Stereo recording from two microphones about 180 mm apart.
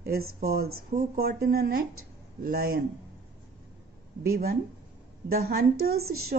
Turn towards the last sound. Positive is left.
turn(degrees=-55)  # may be behind; listen again after turning